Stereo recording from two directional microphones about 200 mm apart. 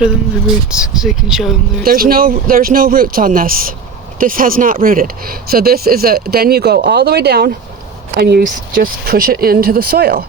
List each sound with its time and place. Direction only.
0.7 s speech: 5° right (ahead or behind)
1.8 s speech: 45° right (ahead or behind)